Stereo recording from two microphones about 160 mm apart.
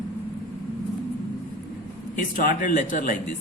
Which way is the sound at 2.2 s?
60° left (ahead or behind).